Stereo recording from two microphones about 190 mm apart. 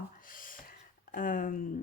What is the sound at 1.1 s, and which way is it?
Speech, 45° left (ahead or behind).